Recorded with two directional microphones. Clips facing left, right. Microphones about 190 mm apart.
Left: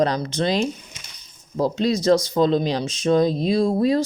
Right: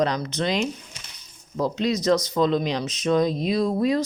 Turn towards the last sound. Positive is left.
turn(degrees=35)  # may be behind; listen again after turning